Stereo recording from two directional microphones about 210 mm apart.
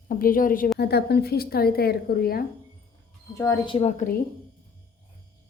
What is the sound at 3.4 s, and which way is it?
Speech, 20° left (ahead or behind).